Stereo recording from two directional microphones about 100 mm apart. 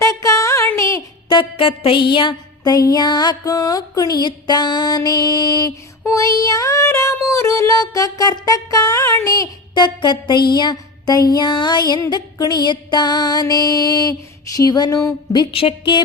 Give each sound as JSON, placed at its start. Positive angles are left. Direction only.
{"t": 0.0, "sound": "a sound", "side_deg": 35}
{"t": 0.8, "sound": "music", "side_deg": 30}
{"t": 1.3, "sound": "music", "side_deg": 60}
{"t": 2.7, "sound": "child singing", "side_deg": 40}
{"t": 9.7, "sound": "music", "side_deg": 50}
{"t": 12.1, "sound": "child singing", "side_deg": 45}
{"t": 15.5, "sound": "a woman's voice", "side_deg": 60}